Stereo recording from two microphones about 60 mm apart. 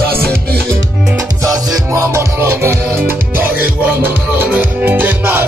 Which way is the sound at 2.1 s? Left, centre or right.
Right.